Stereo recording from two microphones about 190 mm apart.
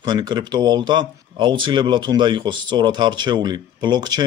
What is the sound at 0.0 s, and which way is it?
Speech, 20° right (ahead or behind).